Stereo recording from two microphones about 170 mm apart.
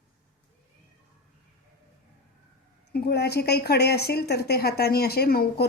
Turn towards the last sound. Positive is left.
turn(degrees=65)  # may be behind; listen again after turning